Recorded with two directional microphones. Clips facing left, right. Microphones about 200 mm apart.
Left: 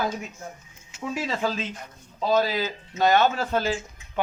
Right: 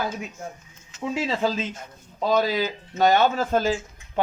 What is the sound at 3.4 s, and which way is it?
Speech, 40° right (ahead or behind).